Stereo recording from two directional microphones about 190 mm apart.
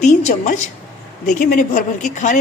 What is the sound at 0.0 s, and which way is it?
A woman's voice, 35° left (ahead or behind).